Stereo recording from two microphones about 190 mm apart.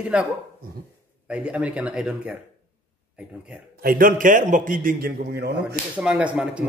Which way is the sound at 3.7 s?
50° right (ahead or behind).